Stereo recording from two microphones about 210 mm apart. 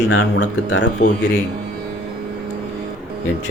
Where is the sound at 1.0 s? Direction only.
35° left (ahead or behind).